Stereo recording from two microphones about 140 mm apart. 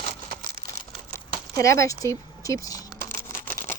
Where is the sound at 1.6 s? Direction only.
20° left (ahead or behind).